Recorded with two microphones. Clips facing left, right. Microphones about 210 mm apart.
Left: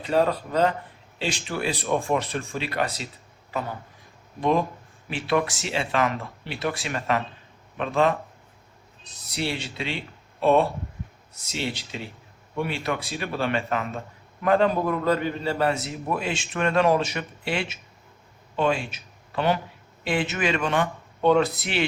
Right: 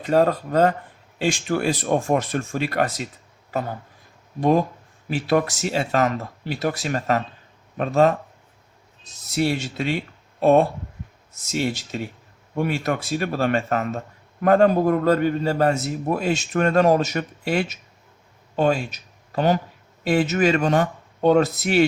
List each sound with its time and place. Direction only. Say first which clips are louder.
0.0 s a man's voice: right 4 dB; 45° right (ahead or behind)
4.4 s a man's voice: right 4 dB; 40° right (ahead or behind)